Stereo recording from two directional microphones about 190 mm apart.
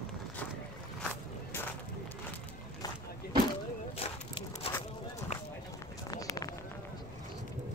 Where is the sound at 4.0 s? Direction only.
30° left (ahead or behind).